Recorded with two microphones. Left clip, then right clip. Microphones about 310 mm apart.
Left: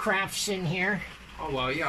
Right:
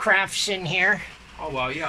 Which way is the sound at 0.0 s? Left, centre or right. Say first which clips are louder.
Right 7 dB; right.